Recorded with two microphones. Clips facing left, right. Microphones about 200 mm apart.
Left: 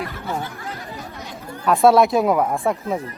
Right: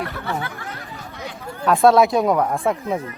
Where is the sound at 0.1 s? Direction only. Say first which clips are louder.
Right 1 dB; 65° right (ahead or behind).